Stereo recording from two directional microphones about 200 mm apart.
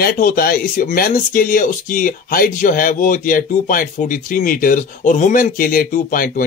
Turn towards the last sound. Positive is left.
turn(degrees=45)  # may be behind; listen again after turning